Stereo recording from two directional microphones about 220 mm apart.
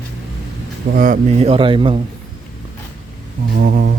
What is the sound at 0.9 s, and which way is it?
Speech, 40° right (ahead or behind).